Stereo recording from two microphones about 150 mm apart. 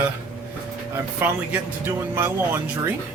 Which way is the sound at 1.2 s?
15° right (ahead or behind).